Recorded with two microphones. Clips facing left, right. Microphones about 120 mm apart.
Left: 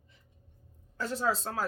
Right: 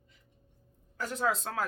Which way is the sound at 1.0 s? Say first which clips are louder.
Even; 30° left (ahead or behind).